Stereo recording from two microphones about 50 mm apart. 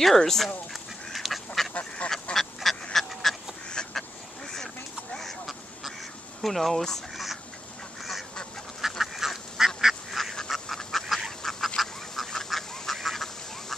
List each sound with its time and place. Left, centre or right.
0.0 s speech: centre
1.1 s duck: centre
1.7 s duck: left
2.3 s duck: centre
6.4 s speech: centre
8.0 s duck: centre